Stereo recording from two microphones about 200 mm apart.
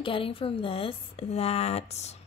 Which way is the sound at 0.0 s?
25° left (ahead or behind).